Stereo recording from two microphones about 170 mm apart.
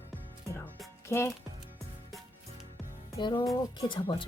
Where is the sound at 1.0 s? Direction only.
15° left (ahead or behind).